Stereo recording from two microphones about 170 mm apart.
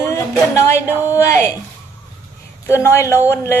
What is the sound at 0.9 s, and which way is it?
Speech, 10° right (ahead or behind).